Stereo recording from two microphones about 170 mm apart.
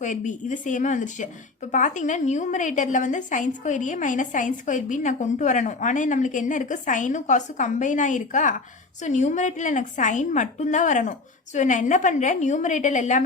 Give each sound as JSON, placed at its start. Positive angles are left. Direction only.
{"t": 0.0, "sound": "a woman's voice", "side_deg": 45}